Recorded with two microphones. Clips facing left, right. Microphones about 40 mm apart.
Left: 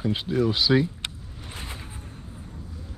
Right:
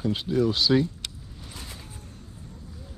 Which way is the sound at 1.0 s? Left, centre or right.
Left.